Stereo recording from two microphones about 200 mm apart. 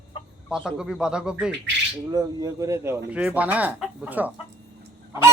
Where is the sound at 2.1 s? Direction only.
20° right (ahead or behind).